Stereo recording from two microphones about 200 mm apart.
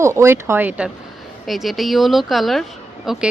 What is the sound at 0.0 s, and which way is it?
A woman's voice, 15° right (ahead or behind).